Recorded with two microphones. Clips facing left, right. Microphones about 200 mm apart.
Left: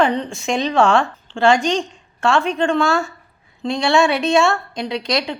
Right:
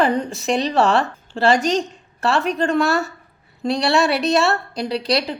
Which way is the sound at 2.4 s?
40° right (ahead or behind).